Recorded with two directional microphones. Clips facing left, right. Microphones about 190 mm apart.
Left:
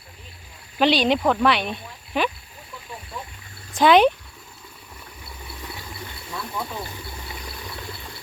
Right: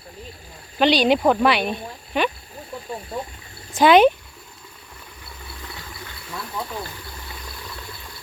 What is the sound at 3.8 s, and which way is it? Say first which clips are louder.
Speech: right 2 dB; centre (ahead or behind).